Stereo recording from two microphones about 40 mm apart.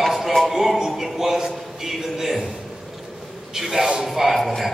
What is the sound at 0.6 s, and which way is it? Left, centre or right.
A man's voice, centre.